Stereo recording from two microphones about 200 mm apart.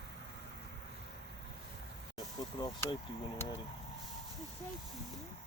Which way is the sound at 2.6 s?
20° left (ahead or behind).